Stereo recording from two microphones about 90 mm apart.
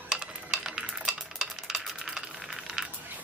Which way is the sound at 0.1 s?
10° right (ahead or behind).